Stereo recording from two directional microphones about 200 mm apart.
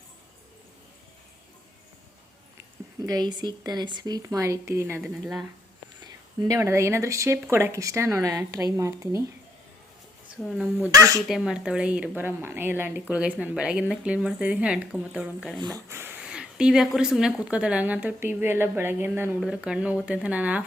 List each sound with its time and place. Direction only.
3.1 s speech: 20° right (ahead or behind); by 5.5 s 5° right (ahead or behind)
6.4 s speech: 15° right (ahead or behind)
10.4 s speech: centre (ahead or behind)
10.8 s speech: 15° right (ahead or behind)
11.3 s speech: 5° right (ahead or behind)
15.5 s speech: 20° right (ahead or behind)